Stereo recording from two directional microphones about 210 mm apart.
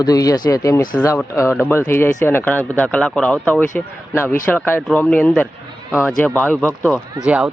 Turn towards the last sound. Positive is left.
turn(degrees=-5)  # may be behind; listen again after turning